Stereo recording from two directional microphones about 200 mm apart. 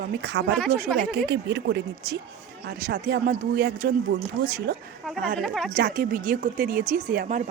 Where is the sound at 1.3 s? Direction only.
60° right (ahead or behind).